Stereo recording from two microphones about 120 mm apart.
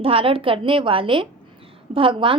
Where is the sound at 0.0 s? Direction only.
50° right (ahead or behind).